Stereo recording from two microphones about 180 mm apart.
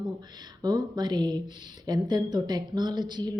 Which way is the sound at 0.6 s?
20° right (ahead or behind).